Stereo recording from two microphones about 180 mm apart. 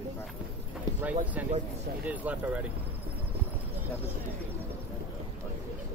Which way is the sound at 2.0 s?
10° right (ahead or behind).